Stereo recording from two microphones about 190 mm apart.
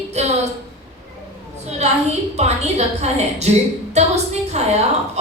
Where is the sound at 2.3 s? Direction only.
35° right (ahead or behind).